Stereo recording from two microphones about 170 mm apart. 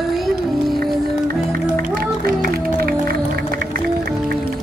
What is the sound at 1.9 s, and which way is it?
Music, 60° right (ahead or behind).